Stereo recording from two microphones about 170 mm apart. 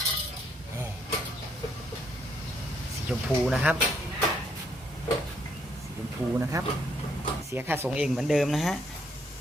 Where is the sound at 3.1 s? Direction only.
5° right (ahead or behind).